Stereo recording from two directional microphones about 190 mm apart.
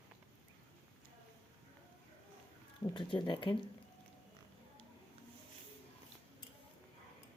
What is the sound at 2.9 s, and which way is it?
Speech, 25° left (ahead or behind).